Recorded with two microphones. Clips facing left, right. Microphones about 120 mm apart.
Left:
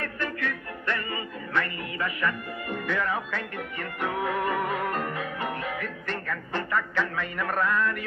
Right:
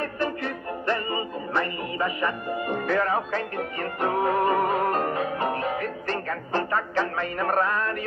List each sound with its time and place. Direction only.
0.0 s music: 35° right (ahead or behind)